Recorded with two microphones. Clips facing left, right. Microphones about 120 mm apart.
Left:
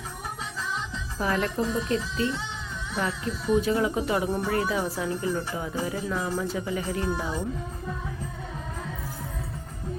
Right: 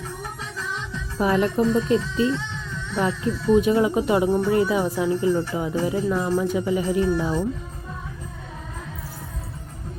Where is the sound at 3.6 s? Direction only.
20° right (ahead or behind).